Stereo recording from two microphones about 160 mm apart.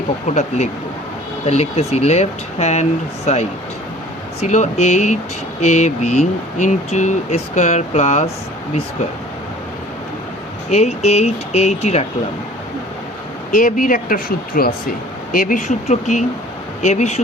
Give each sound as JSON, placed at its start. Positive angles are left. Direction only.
{"t": 0.3, "sound": "speech", "side_deg": 45}
{"t": 10.7, "sound": "speech", "side_deg": 45}
{"t": 13.5, "sound": "speech", "side_deg": 55}